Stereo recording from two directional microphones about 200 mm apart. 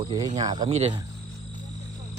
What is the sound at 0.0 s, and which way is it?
Music, 25° right (ahead or behind).